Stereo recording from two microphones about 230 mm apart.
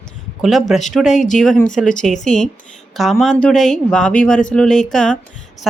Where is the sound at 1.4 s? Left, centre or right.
Centre.